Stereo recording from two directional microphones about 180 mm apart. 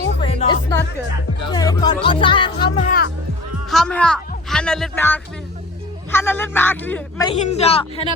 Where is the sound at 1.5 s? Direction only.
20° left (ahead or behind).